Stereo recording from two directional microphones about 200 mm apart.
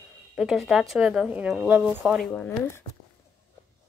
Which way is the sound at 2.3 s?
10° left (ahead or behind).